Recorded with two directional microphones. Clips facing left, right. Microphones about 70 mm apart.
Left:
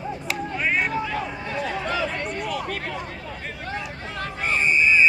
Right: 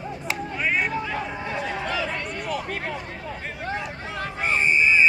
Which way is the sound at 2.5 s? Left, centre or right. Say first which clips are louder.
Even; centre.